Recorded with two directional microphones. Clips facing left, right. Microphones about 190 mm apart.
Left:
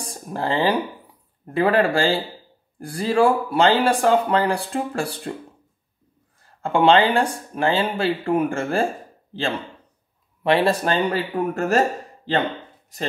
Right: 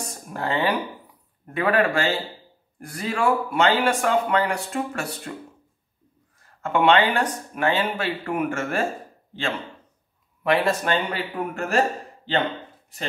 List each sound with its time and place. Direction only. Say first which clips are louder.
0.0 s speech: left 3 dB; 30° left (ahead or behind)
6.6 s speech: left 3 dB; 30° left (ahead or behind)
10.4 s speech: left 3 dB; 30° left (ahead or behind)